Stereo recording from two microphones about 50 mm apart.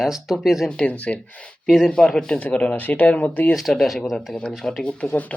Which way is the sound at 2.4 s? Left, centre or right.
Left.